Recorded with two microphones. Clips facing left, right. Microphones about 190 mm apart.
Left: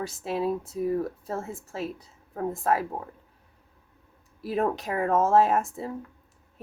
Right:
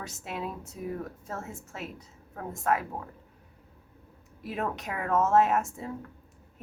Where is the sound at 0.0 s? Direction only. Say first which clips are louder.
Left 8 dB; 35° left (ahead or behind).